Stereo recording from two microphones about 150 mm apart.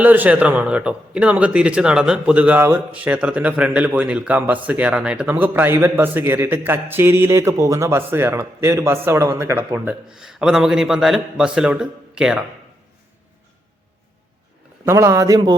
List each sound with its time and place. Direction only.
0.0 s speech: 10° right (ahead or behind)
9.7 s a man's voice: 5° right (ahead or behind)
14.8 s a man's voice: 20° right (ahead or behind)